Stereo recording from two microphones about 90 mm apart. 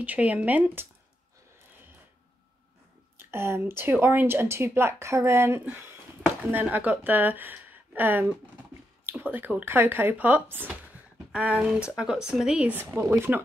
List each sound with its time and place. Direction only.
0.0 s speech: 15° right (ahead or behind)
3.2 s speech: 25° right (ahead or behind)
10.7 s a sound: 15° right (ahead or behind)
12.0 s speech: 10° right (ahead or behind)
12.9 s speech: 30° right (ahead or behind)